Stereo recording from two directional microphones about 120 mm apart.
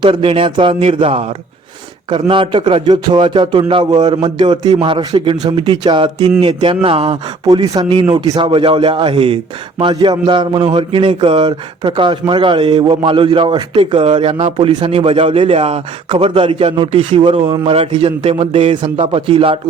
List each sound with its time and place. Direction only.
0.0 s a man's voice: 45° right (ahead or behind)
14.5 s a man's voice: 40° right (ahead or behind)
14.8 s a man's voice: 55° right (ahead or behind)
17.7 s speech: 50° right (ahead or behind)